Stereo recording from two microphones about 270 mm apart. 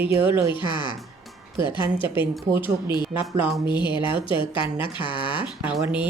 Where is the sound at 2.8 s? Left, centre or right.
Centre.